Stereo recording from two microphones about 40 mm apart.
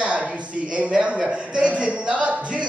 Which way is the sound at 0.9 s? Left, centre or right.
Centre.